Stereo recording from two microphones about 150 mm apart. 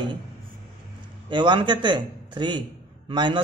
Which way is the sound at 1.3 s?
30° right (ahead or behind).